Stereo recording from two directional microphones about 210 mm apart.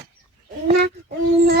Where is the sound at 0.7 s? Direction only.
50° right (ahead or behind).